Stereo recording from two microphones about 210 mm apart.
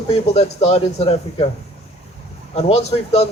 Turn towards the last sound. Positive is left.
turn(degrees=30)  # may be behind; listen again after turning